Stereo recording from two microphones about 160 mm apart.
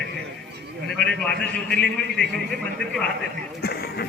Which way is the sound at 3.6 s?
75° left (ahead or behind).